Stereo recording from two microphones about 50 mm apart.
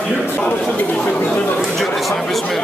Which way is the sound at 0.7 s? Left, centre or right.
Left.